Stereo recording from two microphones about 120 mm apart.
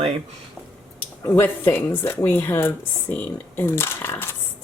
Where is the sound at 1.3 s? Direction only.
15° left (ahead or behind).